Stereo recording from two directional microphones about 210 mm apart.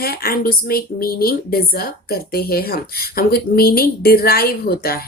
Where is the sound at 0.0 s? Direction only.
45° left (ahead or behind).